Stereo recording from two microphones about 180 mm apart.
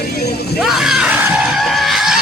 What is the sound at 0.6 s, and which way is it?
Screaming, centre (ahead or behind).